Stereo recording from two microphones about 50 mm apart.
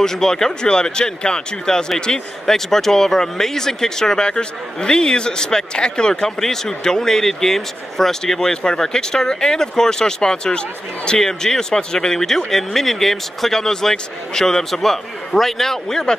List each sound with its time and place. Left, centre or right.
0.0 s speech: centre